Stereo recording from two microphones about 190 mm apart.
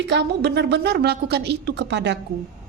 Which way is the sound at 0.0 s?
65° right (ahead or behind).